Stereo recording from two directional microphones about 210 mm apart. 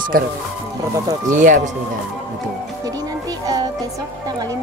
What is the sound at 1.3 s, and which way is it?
Speech, 35° right (ahead or behind).